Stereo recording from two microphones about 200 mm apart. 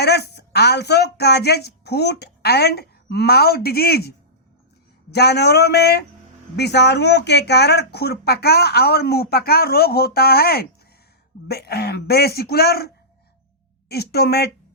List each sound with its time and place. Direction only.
0.0 s a woman's voice: 55° left (ahead or behind)
5.1 s speech: 55° left (ahead or behind)